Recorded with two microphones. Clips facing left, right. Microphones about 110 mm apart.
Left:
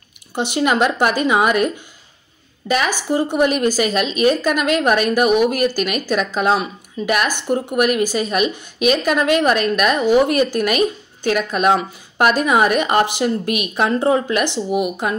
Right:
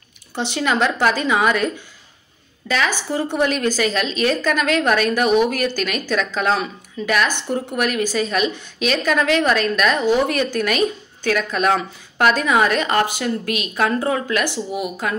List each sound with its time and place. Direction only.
0.3 s a woman's voice: 15° left (ahead or behind)
2.7 s a woman's voice: 15° left (ahead or behind)